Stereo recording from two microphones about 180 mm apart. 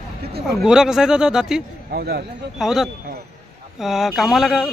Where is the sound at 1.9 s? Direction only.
65° right (ahead or behind).